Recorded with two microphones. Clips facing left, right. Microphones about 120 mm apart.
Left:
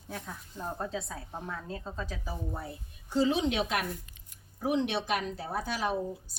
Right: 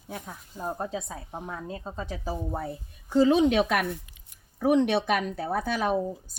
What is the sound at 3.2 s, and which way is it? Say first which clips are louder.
A woman's voice: right 7 dB; 50° right (ahead or behind).